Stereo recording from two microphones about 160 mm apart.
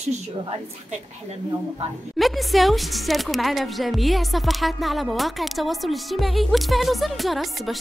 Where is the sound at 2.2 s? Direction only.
Centre (ahead or behind).